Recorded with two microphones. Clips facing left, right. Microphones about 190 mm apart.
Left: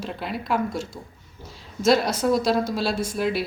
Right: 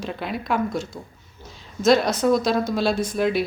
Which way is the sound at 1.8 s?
5° left (ahead or behind).